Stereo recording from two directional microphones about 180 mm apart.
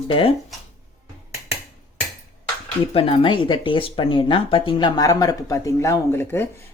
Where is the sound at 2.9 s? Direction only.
30° left (ahead or behind); by 6.5 s 10° left (ahead or behind).